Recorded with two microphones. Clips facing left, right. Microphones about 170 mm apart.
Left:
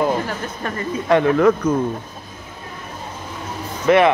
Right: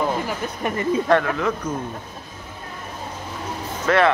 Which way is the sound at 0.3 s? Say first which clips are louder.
Right 1 dB; 15° right (ahead or behind).